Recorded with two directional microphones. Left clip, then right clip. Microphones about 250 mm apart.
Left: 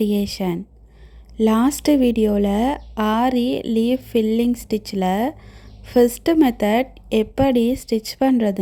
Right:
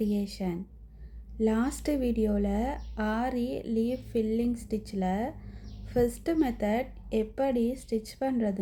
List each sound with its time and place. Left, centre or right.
0.0 s speech: left